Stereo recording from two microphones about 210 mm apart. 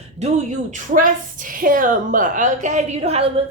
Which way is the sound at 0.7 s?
40° right (ahead or behind).